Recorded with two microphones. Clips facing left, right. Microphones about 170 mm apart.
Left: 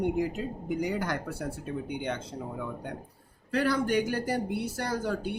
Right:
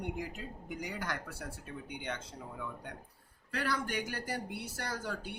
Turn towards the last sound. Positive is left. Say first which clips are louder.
# left 8 dB
turn(degrees=25)  # may be behind; listen again after turning